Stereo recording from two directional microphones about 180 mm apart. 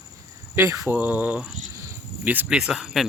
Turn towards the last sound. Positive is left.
turn(degrees=0)  # may be behind; listen again after turning